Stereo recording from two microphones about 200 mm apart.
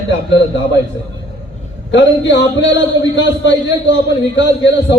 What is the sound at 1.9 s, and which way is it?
A man's voice, 65° left (ahead or behind).